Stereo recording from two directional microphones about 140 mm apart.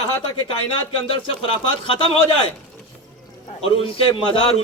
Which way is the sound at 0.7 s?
40° left (ahead or behind).